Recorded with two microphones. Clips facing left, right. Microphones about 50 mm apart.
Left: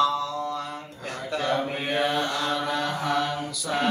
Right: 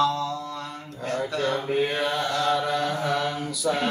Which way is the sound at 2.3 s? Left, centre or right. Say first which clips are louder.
Right 3 dB; centre.